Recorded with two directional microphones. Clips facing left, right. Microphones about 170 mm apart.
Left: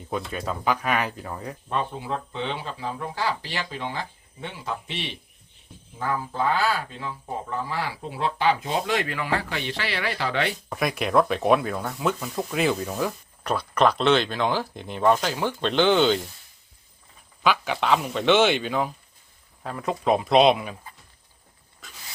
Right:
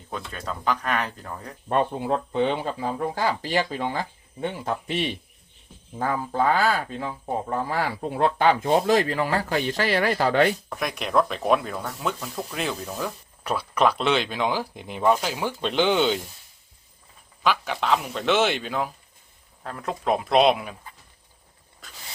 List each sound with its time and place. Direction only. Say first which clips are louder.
0.1 s speech: left 4 dB; 10° left (ahead or behind)
1.7 s speech: right 6 dB; 55° right (ahead or behind)
10.7 s speech: left 3 dB; 5° left (ahead or behind)
13.4 s speech: left 1 dB; 10° right (ahead or behind)
17.4 s speech: left 1 dB; centre (ahead or behind)